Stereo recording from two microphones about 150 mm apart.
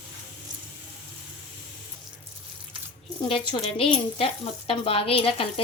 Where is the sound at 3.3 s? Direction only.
35° left (ahead or behind).